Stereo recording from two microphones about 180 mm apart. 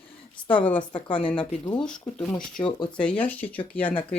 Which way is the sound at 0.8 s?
25° left (ahead or behind).